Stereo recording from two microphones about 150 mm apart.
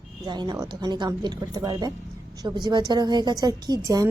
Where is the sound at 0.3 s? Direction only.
30° right (ahead or behind).